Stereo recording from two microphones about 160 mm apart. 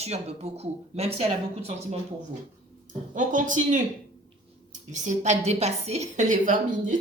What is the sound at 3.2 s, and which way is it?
Speech, 55° right (ahead or behind).